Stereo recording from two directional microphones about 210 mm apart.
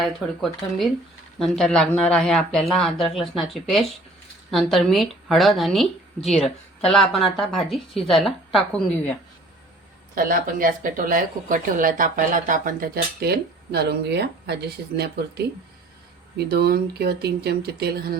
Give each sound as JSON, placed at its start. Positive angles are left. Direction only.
{"t": 0.0, "sound": "speech", "side_deg": 0}
{"t": 10.2, "sound": "speech", "side_deg": -40}